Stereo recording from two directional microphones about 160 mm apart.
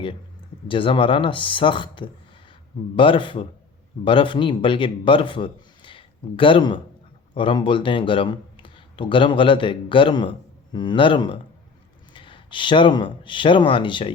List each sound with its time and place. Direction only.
0.7 s a man's voice: 35° left (ahead or behind)